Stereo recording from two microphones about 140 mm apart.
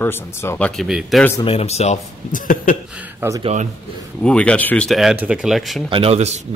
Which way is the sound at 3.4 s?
50° right (ahead or behind).